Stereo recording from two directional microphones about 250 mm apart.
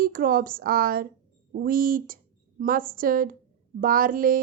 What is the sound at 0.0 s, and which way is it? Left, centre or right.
A woman's voice, right.